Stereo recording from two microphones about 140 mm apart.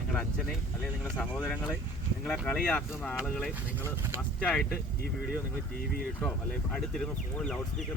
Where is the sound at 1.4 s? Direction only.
20° left (ahead or behind).